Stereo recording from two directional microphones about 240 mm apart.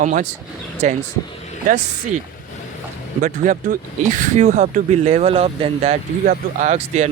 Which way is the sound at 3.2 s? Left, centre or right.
Right.